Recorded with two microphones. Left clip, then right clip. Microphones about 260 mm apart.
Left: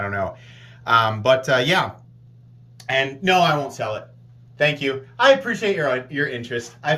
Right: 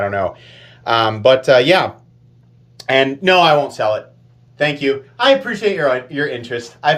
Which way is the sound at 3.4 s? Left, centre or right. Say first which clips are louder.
Right 7 dB; centre.